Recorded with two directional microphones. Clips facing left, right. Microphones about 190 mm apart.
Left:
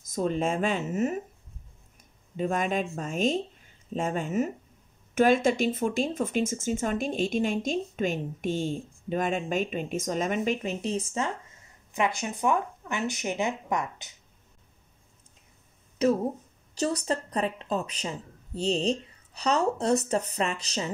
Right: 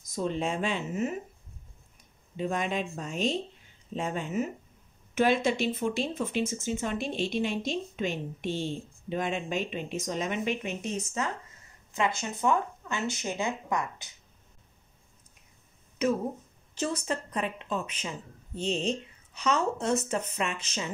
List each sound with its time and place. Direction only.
0.0 s speech: 50° left (ahead or behind)
2.3 s speech: 45° left (ahead or behind); by 11.3 s 30° left (ahead or behind)
11.9 s speech: 15° left (ahead or behind)
16.0 s speech: 35° left (ahead or behind)